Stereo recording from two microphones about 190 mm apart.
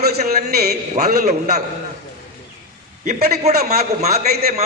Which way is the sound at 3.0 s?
40° right (ahead or behind).